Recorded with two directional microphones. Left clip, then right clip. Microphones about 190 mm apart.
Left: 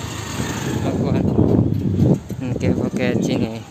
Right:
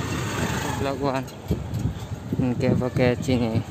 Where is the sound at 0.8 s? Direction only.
5° right (ahead or behind).